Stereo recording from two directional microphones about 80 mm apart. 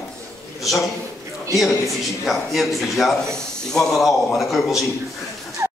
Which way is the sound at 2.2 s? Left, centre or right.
Centre.